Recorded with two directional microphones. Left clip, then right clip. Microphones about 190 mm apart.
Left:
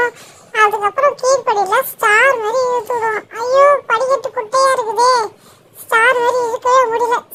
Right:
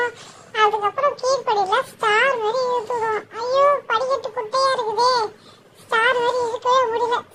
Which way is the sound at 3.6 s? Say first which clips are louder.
Left 6 dB; 45° left (ahead or behind).